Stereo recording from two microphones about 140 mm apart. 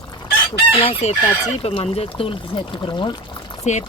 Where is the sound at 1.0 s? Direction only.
55° left (ahead or behind); by 3.7 s 30° left (ahead or behind).